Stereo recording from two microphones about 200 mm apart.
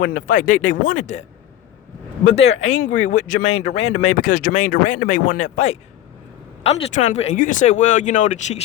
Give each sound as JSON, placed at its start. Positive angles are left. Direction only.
{"t": 0.0, "sound": "speech", "side_deg": 45}
{"t": 2.2, "sound": "speech", "side_deg": 35}